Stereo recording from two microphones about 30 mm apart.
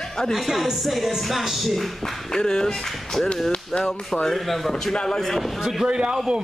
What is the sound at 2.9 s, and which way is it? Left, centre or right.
Speech, centre.